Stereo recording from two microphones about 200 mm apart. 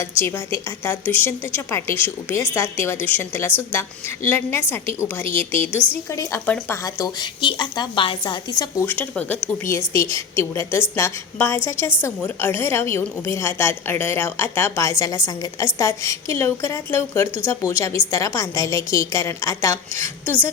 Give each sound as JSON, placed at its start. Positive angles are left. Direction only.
{"t": 0.2, "sound": "a woman's voice", "side_deg": 10}